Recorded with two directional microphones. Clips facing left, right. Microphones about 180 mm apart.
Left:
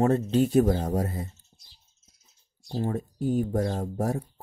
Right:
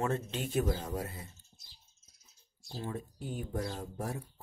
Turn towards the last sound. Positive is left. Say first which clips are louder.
# left 10 dB
turn(degrees=40)  # may be behind; listen again after turning